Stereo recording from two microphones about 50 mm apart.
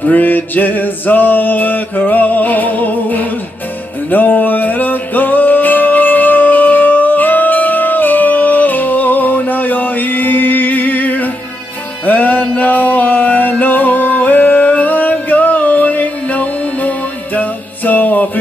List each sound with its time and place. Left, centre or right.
0.0 s music: left